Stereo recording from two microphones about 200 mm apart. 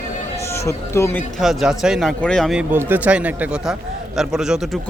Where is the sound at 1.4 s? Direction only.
Centre (ahead or behind).